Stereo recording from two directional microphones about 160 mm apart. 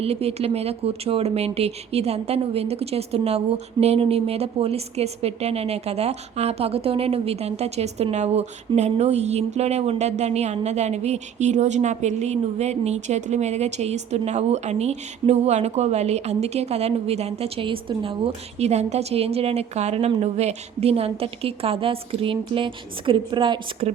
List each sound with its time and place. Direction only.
0.0 s speech: 40° right (ahead or behind)